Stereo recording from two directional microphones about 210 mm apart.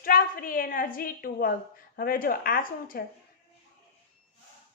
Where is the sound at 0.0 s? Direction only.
40° left (ahead or behind).